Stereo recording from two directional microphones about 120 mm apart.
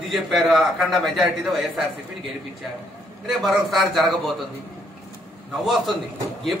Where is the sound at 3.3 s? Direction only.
Centre (ahead or behind).